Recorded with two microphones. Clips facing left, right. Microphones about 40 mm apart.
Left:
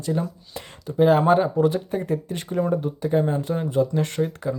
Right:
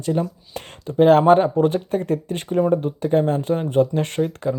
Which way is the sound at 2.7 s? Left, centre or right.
Right.